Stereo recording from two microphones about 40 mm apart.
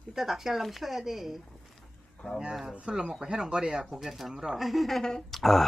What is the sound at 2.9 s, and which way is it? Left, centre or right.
Speech, centre.